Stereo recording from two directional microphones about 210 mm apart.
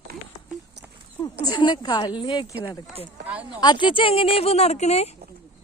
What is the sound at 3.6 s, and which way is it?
Speech, 20° left (ahead or behind).